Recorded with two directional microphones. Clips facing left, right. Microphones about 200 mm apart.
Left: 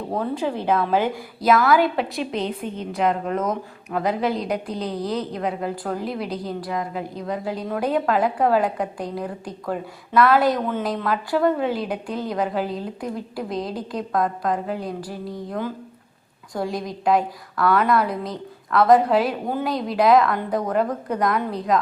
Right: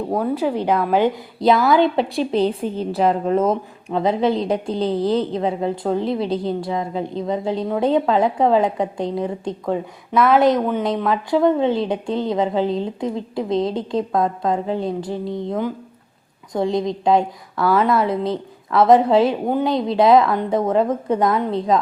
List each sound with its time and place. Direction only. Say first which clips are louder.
0.1 s a woman's voice: right 3 dB; 10° right (ahead or behind); by 5.0 s 25° right (ahead or behind)
5.0 s a woman's voice: right 7 dB; centre (ahead or behind)
5.3 s a woman's voice: right 5 dB; 25° right (ahead or behind)